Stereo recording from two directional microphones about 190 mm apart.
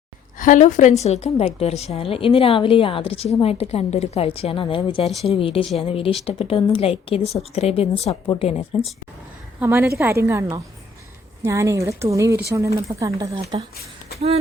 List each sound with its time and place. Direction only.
0.3 s a woman's voice: 40° left (ahead or behind)
9.6 s speech: 15° right (ahead or behind)